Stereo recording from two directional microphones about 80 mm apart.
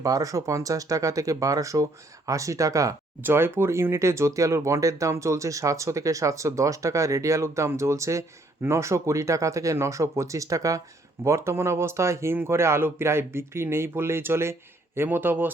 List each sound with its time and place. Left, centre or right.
0.0 s speech: right
3.2 s a man's voice: right